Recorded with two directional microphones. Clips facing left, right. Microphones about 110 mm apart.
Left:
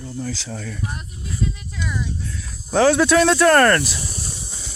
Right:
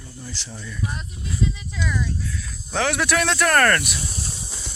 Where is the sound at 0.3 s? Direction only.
80° left.